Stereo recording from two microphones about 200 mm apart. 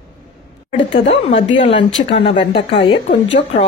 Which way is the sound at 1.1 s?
30° left (ahead or behind).